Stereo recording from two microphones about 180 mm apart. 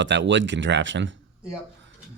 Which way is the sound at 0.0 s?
85° right.